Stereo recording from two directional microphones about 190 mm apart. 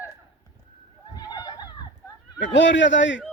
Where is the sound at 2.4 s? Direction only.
75° left (ahead or behind).